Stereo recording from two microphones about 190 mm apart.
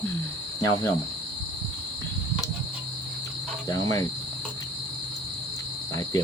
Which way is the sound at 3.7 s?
20° left (ahead or behind).